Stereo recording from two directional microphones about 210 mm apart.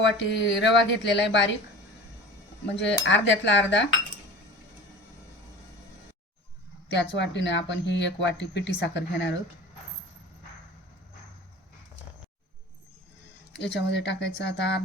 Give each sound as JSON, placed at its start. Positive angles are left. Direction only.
{"t": 0.0, "sound": "speech", "side_deg": 60}
{"t": 3.0, "sound": "speech", "side_deg": 60}
{"t": 6.8, "sound": "speech", "side_deg": 55}
{"t": 13.6, "sound": "speech", "side_deg": 55}